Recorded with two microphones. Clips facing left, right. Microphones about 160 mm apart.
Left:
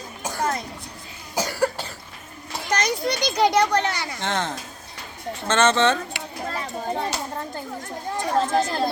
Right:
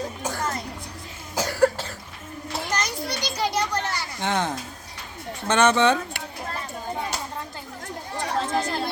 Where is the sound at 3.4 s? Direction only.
75° left (ahead or behind).